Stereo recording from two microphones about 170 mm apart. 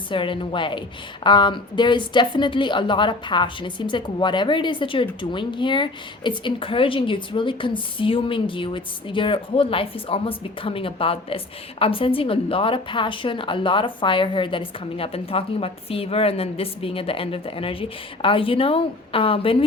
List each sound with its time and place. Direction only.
0.1 s a woman's voice: 30° left (ahead or behind)